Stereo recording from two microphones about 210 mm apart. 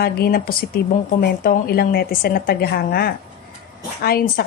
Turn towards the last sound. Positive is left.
turn(degrees=45)  # may be behind; listen again after turning